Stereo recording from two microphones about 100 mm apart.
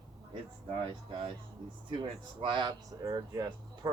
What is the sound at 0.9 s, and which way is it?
Speech, 60° right (ahead or behind).